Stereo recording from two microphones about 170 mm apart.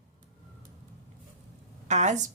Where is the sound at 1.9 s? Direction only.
45° right (ahead or behind).